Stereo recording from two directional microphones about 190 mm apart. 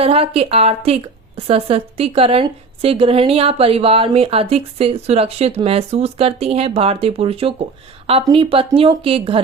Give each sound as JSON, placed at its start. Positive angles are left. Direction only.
{"t": 0.0, "sound": "a woman's voice", "side_deg": -30}